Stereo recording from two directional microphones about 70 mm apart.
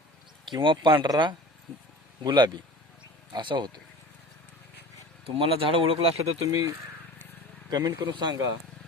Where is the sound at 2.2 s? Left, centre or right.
Right.